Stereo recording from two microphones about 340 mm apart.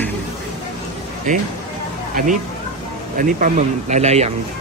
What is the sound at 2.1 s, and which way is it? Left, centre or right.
Speech, right.